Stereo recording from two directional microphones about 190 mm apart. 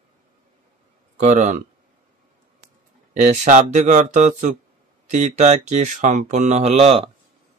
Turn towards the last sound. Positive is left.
turn(degrees=-30)  # may be behind; listen again after turning